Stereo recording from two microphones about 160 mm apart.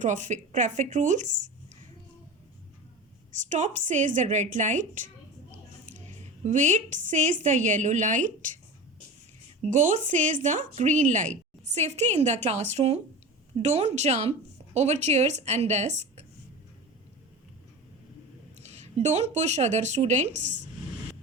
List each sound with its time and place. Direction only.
0.0 s speech: 50° right (ahead or behind)
3.5 s speech: 50° right (ahead or behind)
9.6 s speech: 50° right (ahead or behind)
18.6 s speech: 45° right (ahead or behind)